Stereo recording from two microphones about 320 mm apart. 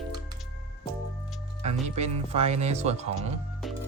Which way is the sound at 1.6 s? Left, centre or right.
Centre.